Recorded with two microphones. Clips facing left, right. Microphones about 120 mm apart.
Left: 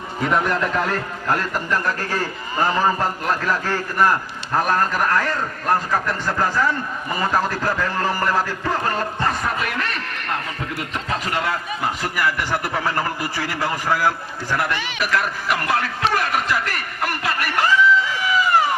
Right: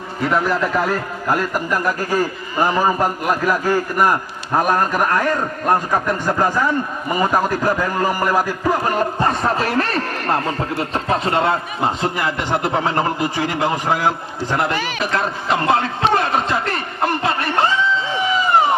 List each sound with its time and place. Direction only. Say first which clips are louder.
0.2 s a man's voice: right 2 dB; centre (ahead or behind)
9.2 s speech: right 3 dB; 25° right (ahead or behind)
14.7 s speech: right 4 dB; 40° right (ahead or behind)
15.0 s a sound: left 1 dB; 25° right (ahead or behind)